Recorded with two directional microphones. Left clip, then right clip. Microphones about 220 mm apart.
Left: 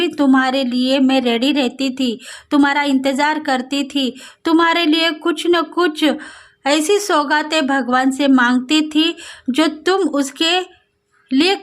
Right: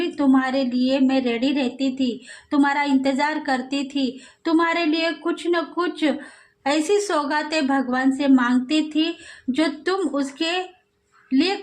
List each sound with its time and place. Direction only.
0.0 s a woman's voice: 45° left (ahead or behind)